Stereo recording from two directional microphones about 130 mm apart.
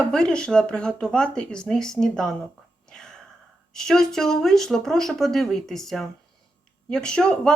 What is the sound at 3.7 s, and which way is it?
Speech, 5° left (ahead or behind).